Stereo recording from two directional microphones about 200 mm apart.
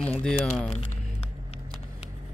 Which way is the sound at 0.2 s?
5° left (ahead or behind).